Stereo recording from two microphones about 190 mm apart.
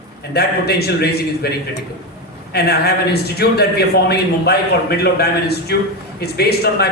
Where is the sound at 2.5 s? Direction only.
55° left (ahead or behind).